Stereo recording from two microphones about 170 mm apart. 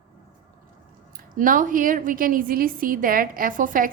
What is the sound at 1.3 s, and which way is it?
A woman's voice, 50° right (ahead or behind).